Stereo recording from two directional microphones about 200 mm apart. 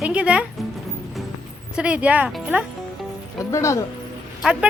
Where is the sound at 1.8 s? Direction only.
5° right (ahead or behind).